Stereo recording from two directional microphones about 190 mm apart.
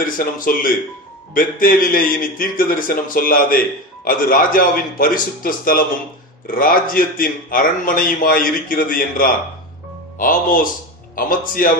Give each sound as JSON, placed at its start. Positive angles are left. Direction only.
{"t": 0.0, "sound": "a man's voice", "side_deg": 45}